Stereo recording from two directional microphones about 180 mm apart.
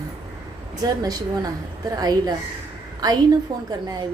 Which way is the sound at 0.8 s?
20° right (ahead or behind).